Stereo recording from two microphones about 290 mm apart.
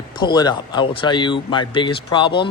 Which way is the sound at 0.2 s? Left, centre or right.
Centre.